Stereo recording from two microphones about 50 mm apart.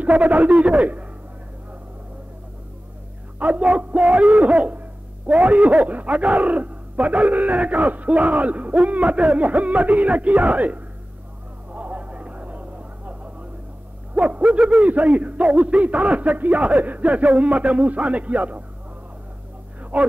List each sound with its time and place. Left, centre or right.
0.0 s a man's voice: right
3.3 s a man's voice: right
11.7 s vehicle: right
14.1 s a man's voice: right
19.8 s a sound: right